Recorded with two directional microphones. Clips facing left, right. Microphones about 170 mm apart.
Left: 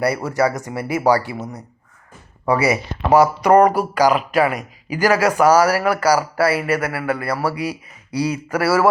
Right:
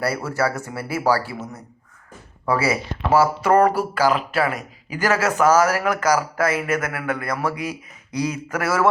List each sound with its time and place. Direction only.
0.0 s speech: 15° left (ahead or behind)